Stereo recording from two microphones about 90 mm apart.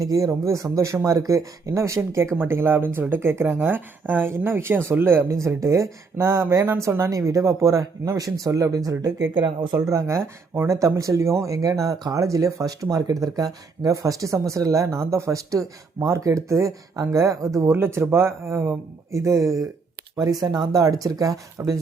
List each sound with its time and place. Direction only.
0.0 s speech: 40° right (ahead or behind)
9.3 s speech: 60° right (ahead or behind)
9.7 s speech: 35° right (ahead or behind)